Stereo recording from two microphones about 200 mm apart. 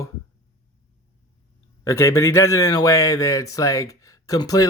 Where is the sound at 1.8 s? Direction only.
15° left (ahead or behind).